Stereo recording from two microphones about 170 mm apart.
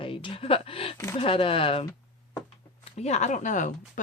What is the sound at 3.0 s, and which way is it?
Speech, 40° left (ahead or behind).